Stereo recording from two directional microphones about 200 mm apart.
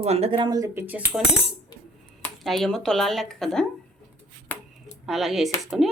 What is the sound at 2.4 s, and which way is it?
Speech, centre (ahead or behind).